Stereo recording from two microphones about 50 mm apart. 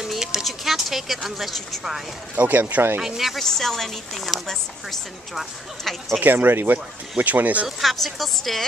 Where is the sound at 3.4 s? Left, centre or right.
Centre.